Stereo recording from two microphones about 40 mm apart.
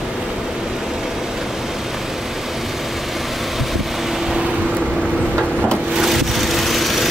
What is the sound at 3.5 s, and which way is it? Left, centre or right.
Vehicle, centre.